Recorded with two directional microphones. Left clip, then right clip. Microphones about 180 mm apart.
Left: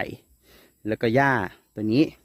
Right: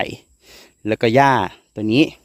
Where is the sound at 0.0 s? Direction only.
25° right (ahead or behind).